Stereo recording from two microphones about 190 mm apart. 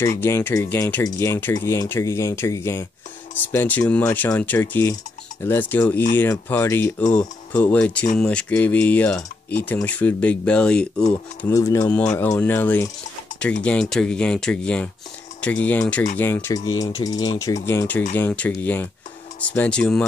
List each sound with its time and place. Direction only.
0.2 s speech: 10° left (ahead or behind)
11.4 s speech: 15° left (ahead or behind)